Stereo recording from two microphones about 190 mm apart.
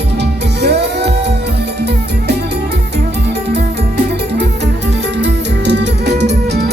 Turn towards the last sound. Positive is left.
turn(degrees=-65)  # may be behind; listen again after turning